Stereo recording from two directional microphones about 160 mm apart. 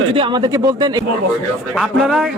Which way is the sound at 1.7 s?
Centre (ahead or behind).